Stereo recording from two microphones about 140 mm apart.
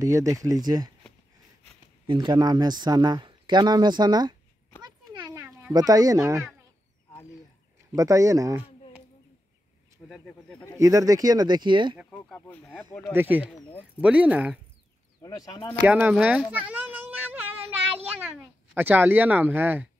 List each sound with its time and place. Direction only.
0.0 s speech: 25° right (ahead or behind)
2.0 s speech: 30° right (ahead or behind)
4.8 s a sound: 30° right (ahead or behind)
5.7 s speech: 25° right (ahead or behind)
7.9 s speech: 25° right (ahead or behind)
10.0 s speech: 5° left (ahead or behind)
10.8 s speech: 25° right (ahead or behind)
12.1 s speech: 15° left (ahead or behind)
13.1 s speech: 15° right (ahead or behind)
15.2 s speech: 25° left (ahead or behind)
15.8 s a sound: 10° right (ahead or behind)
18.3 s speech: 15° right (ahead or behind)